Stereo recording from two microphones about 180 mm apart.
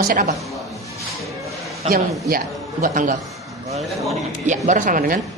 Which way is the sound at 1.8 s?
35° right (ahead or behind).